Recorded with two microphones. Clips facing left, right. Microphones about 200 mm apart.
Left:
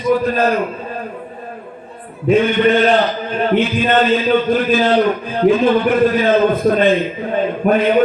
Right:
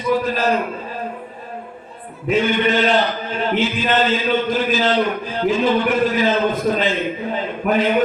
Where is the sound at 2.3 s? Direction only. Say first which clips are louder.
Left 5 dB; 55° left (ahead or behind).